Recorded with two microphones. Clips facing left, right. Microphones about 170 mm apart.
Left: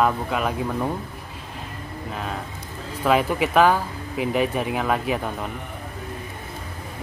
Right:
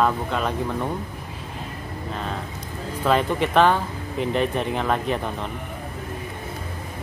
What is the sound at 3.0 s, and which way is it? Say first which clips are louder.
Speech: left 1 dB; 5° left (ahead or behind).